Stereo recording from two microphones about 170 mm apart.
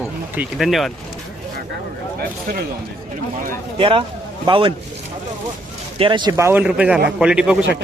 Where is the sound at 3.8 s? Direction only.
30° right (ahead or behind).